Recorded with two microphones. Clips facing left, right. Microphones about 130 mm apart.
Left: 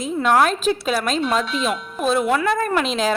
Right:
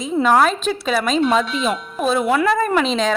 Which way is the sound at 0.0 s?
Centre (ahead or behind).